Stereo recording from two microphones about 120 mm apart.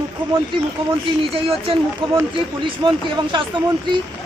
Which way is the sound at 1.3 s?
50° right (ahead or behind).